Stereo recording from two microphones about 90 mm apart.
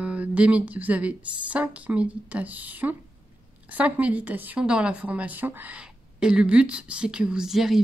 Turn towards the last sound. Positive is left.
turn(degrees=-5)  # may be behind; listen again after turning